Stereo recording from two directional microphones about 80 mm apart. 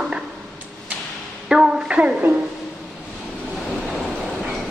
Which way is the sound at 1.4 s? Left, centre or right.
Centre.